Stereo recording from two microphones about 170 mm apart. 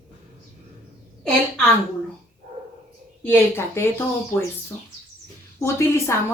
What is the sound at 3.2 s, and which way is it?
Speech, 10° left (ahead or behind).